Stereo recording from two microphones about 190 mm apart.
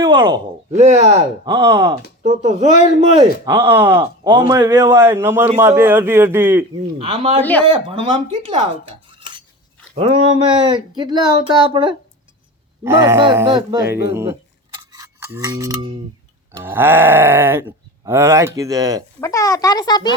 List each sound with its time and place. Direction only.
0.0 s speech: 20° right (ahead or behind)
0.7 s speech: 35° right (ahead or behind)
1.5 s speech: 15° right (ahead or behind)
2.2 s speech: 35° right (ahead or behind)
3.4 s speech: 15° right (ahead or behind)
7.0 s speech: 30° right (ahead or behind)
9.0 s cutlery: 25° right (ahead or behind)
9.9 s speech: 30° right (ahead or behind)
12.8 s speech: 15° right (ahead or behind)
14.8 s a sound: 15° right (ahead or behind)
16.5 s speech: 10° right (ahead or behind)
19.2 s speech: 15° left (ahead or behind)